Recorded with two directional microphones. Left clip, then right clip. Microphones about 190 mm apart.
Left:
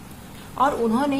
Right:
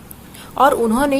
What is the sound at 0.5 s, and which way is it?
Speech, 40° right (ahead or behind).